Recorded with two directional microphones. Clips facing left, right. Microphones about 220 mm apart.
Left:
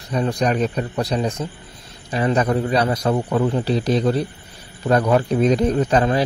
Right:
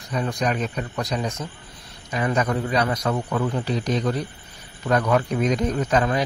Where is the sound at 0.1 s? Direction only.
35° left (ahead or behind).